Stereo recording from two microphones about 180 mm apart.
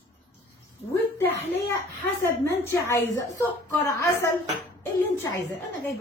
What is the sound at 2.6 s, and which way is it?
A woman's voice, 15° left (ahead or behind).